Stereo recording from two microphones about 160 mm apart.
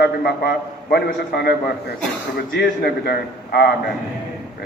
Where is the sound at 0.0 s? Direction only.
90° left.